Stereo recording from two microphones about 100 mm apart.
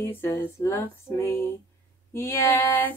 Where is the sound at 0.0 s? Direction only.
25° left (ahead or behind).